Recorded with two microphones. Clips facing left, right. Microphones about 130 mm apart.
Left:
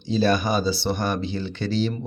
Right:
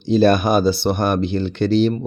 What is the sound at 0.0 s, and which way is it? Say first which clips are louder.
Speech: right 7 dB; 55° right (ahead or behind).